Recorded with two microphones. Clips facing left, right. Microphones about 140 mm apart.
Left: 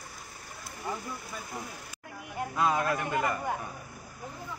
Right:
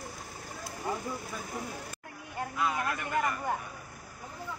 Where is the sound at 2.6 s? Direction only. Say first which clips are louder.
Left 5 dB; 40° left (ahead or behind).